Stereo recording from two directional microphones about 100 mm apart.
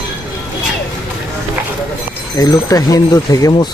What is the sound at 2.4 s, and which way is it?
Speech, 35° left (ahead or behind).